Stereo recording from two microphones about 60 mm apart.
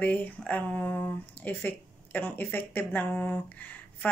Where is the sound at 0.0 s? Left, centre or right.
Left.